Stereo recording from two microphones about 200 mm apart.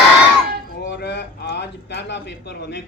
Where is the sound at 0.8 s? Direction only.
60° left (ahead or behind).